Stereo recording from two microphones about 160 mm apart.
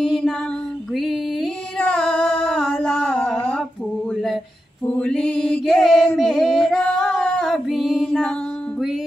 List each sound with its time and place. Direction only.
0.0 s female singing: centre (ahead or behind)
0.9 s a sound: centre (ahead or behind)
4.8 s mantra: 5° left (ahead or behind)